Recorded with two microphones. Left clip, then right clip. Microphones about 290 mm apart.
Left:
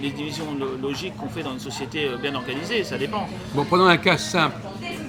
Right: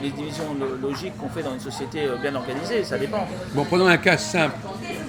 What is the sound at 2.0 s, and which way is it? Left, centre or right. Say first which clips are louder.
A man's voice: right 2 dB; centre.